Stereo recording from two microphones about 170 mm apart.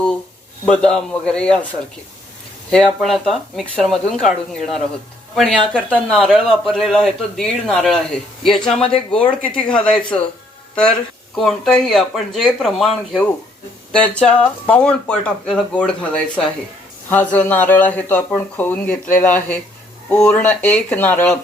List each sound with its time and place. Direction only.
0.6 s a man's voice: 5° left (ahead or behind)
2.6 s a man's voice: 5° left (ahead or behind)
11.3 s a man's voice: centre (ahead or behind)